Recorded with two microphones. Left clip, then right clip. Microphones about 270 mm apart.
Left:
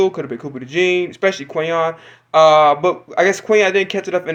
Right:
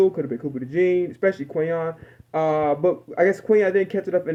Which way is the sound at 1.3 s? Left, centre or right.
Centre.